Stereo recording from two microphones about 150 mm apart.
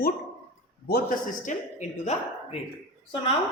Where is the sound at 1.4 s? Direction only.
50° left (ahead or behind).